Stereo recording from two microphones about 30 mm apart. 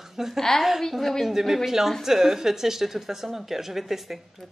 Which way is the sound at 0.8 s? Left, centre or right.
Centre.